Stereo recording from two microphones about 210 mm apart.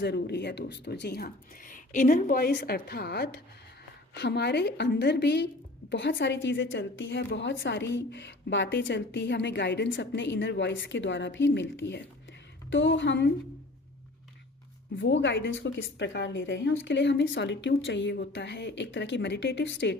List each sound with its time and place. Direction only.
0.0 s a woman's voice: 50° left (ahead or behind)
14.9 s a woman's voice: 60° left (ahead or behind)